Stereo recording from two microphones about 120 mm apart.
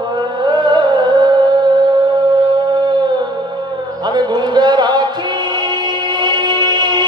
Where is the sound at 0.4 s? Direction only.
40° right (ahead or behind).